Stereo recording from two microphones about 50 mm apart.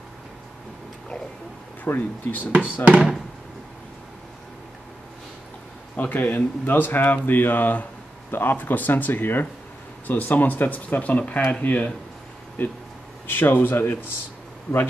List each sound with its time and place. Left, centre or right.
2.0 s speech: left
2.5 s speech: right
5.9 s speech: left
10.0 s speech: left
12.6 s speech: left